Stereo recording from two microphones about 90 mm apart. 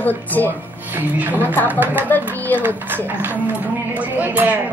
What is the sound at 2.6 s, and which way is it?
A woman's voice, 20° right (ahead or behind).